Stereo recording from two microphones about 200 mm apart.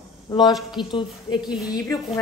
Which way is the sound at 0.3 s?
20° left (ahead or behind).